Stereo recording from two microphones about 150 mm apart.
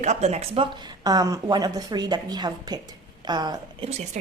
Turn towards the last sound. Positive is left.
turn(degrees=-50)  # may be behind; listen again after turning